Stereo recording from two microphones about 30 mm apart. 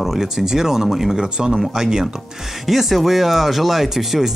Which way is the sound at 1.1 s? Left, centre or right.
Right.